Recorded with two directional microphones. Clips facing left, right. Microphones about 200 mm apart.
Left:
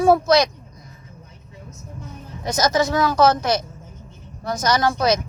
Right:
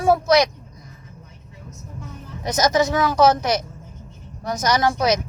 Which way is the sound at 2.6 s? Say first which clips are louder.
Even; 20° right (ahead or behind).